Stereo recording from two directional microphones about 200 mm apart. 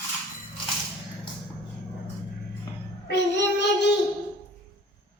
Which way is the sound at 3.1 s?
60° left (ahead or behind).